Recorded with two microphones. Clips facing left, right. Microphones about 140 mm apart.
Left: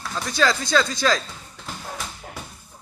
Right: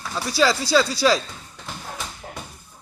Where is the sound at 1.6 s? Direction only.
Centre (ahead or behind).